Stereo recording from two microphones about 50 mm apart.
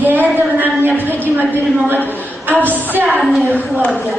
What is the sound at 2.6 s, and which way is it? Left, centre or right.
Speech, right.